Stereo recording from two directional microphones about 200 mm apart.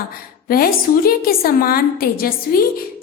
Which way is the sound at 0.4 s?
45° left (ahead or behind).